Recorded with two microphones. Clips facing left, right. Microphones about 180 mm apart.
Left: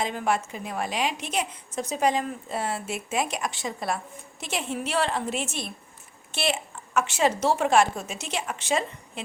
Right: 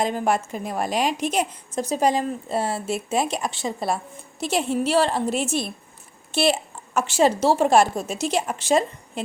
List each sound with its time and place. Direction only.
0.0 s a woman's voice: 40° right (ahead or behind)